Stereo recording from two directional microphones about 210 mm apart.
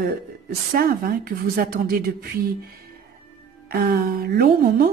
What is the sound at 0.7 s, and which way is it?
A woman's voice, 45° right (ahead or behind).